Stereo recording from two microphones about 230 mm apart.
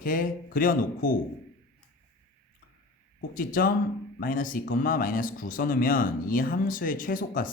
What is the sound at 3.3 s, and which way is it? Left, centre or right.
Speech, left.